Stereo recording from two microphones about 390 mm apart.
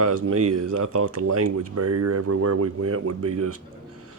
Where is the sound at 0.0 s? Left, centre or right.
Right.